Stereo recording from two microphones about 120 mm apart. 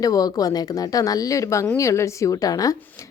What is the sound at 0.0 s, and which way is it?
Speech, 30° left (ahead or behind).